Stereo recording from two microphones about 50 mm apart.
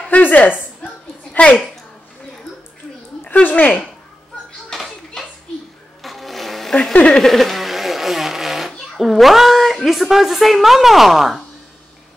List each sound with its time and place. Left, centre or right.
0.1 s a woman's voice: left
3.3 s speech: left
4.7 s a sound: centre
6.7 s speech: centre
7.1 s a sound: centre
8.7 s speech: centre